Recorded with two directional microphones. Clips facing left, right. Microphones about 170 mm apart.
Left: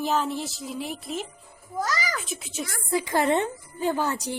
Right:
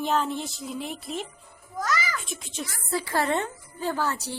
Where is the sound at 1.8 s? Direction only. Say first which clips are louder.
Even; 35° left (ahead or behind).